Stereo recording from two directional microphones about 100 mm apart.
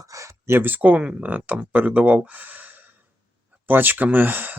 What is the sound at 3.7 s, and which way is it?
Speech, 20° right (ahead or behind).